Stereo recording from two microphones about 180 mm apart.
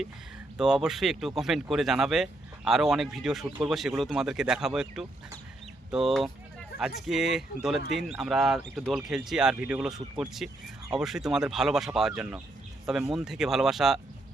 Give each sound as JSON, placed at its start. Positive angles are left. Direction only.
{"t": 0.6, "sound": "speech", "side_deg": -5}
{"t": 6.7, "sound": "speech", "side_deg": 60}
{"t": 7.1, "sound": "speech", "side_deg": 0}